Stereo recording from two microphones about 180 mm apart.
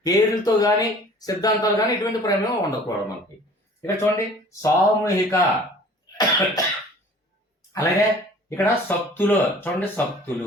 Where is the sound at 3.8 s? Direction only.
15° left (ahead or behind).